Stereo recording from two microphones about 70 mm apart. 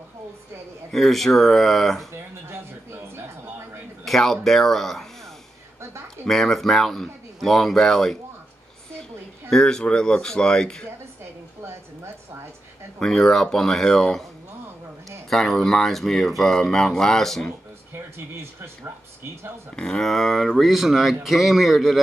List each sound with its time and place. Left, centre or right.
0.9 s speech: centre
2.1 s speech: right
4.0 s speech: centre
6.2 s speech: centre
9.5 s speech: centre
13.0 s speech: centre
15.2 s speech: centre
17.9 s speech: right
19.7 s speech: centre